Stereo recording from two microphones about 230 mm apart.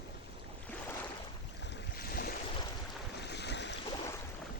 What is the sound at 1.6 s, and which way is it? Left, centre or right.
Boat, left.